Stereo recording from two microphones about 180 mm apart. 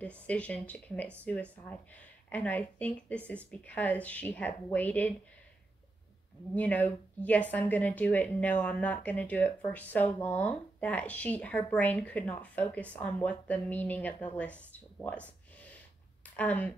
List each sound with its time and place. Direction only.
0.0 s speech: 5° left (ahead or behind)
6.5 s speech: 10° left (ahead or behind)
16.3 s speech: 10° left (ahead or behind)